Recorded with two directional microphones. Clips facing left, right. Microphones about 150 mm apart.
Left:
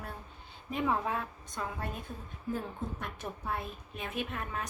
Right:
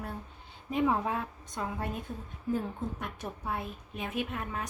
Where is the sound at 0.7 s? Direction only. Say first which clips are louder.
Right 3 dB; 15° right (ahead or behind).